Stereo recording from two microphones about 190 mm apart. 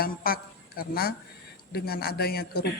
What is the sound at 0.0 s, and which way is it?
Speech, 50° left (ahead or behind).